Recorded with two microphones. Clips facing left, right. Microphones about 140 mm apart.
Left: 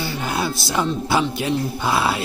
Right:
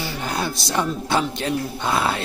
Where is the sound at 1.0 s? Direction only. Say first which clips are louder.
Left 2 dB; 5° left (ahead or behind).